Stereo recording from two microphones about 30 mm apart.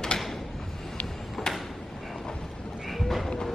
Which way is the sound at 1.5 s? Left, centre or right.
Left.